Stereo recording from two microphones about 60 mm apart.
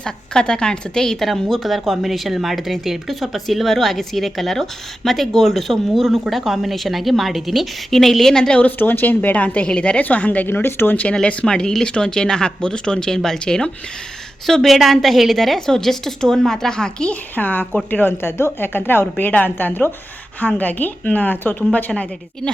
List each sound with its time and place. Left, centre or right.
0.0 s a woman's voice: centre
8.8 s a woman's voice: left
10.5 s a woman's voice: left
11.0 s a woman's voice: centre
17.3 s speech: left
17.9 s a woman's voice: left